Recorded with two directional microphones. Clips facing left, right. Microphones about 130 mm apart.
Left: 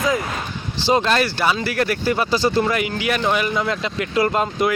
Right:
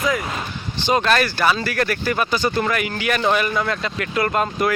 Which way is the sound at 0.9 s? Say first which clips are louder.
Left 1 dB; 25° left (ahead or behind).